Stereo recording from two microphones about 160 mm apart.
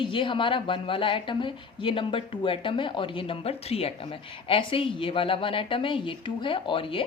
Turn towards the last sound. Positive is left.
turn(degrees=35)  # may be behind; listen again after turning